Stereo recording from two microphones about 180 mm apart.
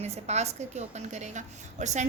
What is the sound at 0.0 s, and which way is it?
A woman's voice, 40° right (ahead or behind).